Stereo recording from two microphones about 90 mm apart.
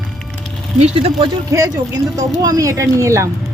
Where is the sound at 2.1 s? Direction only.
45° right (ahead or behind).